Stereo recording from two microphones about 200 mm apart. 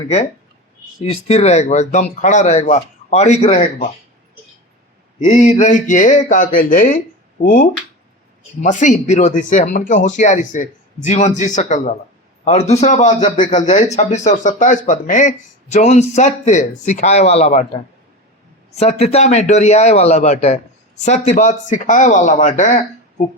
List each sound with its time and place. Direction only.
1.0 s speech: 30° left (ahead or behind)
5.2 s speech: 35° left (ahead or behind)
18.8 s speech: 30° left (ahead or behind)